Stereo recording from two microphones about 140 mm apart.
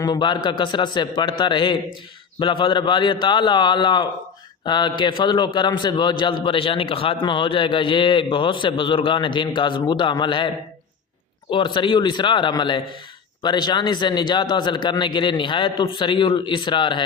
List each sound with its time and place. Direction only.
0.0 s a man's voice: 30° left (ahead or behind)
11.5 s a man's voice: 35° left (ahead or behind)